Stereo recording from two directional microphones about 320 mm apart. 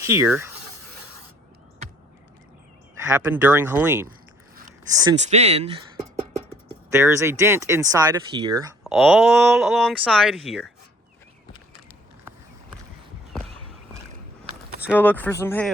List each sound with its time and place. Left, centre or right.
0.0 s speech: centre
3.1 s speech: centre
8.8 s speech: centre
13.5 s a sound: centre
14.8 s speech: centre